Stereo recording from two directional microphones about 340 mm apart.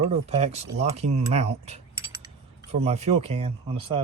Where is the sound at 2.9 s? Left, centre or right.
Centre.